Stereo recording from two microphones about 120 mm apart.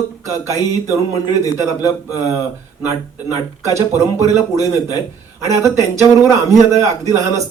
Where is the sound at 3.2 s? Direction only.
25° right (ahead or behind).